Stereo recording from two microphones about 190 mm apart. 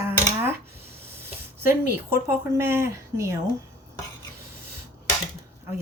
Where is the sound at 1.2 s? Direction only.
10° right (ahead or behind).